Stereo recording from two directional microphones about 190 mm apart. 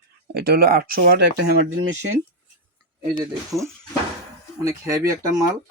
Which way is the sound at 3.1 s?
15° right (ahead or behind).